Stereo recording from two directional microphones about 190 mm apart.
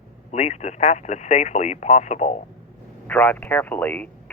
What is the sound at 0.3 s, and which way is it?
Speech, 35° left (ahead or behind).